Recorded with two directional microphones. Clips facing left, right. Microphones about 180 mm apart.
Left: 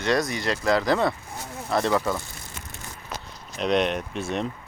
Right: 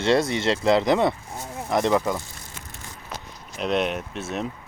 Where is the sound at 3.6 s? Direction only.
5° right (ahead or behind).